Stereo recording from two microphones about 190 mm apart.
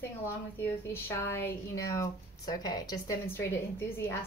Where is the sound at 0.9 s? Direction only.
15° left (ahead or behind).